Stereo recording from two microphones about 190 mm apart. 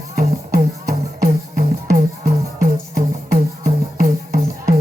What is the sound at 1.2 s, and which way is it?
Music, 45° right (ahead or behind).